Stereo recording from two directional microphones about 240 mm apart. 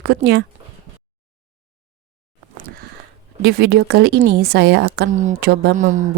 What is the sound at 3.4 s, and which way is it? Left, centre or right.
A woman's voice, right.